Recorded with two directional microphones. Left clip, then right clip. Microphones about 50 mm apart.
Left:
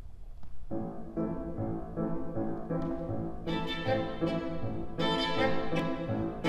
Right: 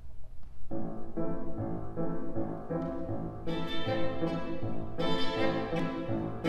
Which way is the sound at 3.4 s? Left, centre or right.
Left.